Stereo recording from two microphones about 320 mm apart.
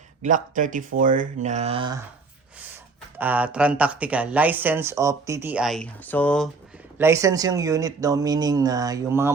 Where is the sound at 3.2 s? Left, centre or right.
Centre.